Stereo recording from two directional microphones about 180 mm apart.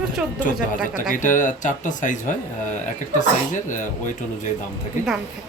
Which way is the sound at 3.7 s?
45° left (ahead or behind).